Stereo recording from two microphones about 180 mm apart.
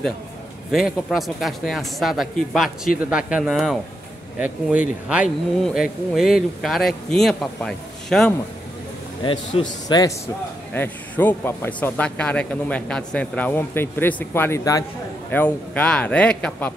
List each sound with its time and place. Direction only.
0.7 s speech: centre (ahead or behind)
9.2 s a man's voice: 30° left (ahead or behind)
15.3 s a man's voice: 10° left (ahead or behind)